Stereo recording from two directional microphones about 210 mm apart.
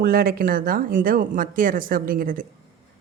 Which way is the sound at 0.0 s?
45° right (ahead or behind).